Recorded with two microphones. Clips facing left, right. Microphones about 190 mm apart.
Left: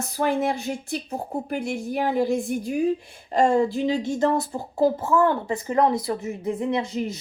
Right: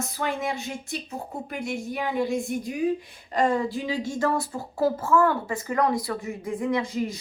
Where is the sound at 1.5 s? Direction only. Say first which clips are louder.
Left 3 dB; 40° left (ahead or behind).